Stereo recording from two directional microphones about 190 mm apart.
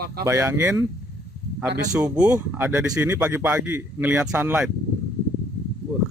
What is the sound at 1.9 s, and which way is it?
Speech, 5° right (ahead or behind).